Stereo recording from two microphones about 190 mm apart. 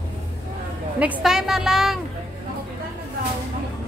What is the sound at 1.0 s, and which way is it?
A woman's voice, 5° right (ahead or behind).